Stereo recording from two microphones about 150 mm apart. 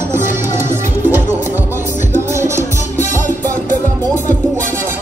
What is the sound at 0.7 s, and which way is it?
Music, 15° right (ahead or behind).